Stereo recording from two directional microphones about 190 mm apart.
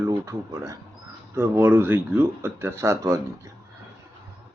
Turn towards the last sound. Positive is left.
turn(degrees=-15)  # may be behind; listen again after turning